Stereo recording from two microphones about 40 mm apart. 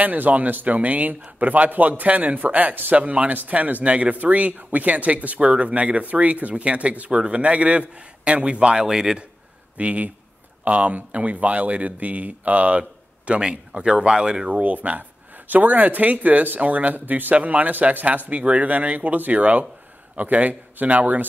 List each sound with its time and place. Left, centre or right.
0.0 s speech: right
8.7 s a man's voice: centre
9.8 s speech: right; by 14.5 s centre
14.5 s speech: right